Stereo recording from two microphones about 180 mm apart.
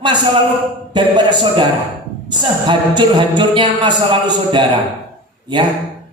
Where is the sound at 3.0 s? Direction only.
25° right (ahead or behind).